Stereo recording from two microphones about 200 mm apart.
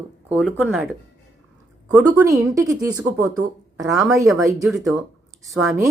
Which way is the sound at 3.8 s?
Centre (ahead or behind).